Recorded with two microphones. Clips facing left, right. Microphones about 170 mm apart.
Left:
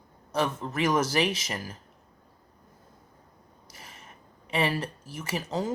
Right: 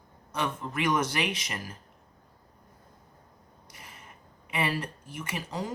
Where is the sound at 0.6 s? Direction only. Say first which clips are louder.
Right 1 dB; 30° left (ahead or behind).